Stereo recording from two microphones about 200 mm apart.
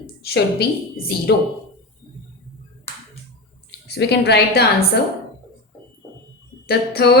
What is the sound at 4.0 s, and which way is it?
A woman's voice, 55° left (ahead or behind).